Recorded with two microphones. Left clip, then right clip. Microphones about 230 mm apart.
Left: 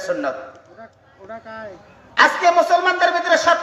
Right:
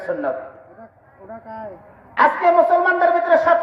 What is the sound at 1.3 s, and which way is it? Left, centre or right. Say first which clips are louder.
Speech: even; right.